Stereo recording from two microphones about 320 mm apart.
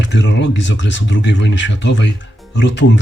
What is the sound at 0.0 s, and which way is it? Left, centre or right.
Speech, left.